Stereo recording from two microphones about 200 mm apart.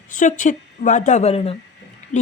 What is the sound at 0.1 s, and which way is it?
Speech, 40° left (ahead or behind).